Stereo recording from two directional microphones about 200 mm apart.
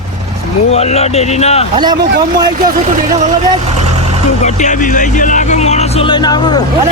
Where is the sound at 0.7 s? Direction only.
30° left (ahead or behind).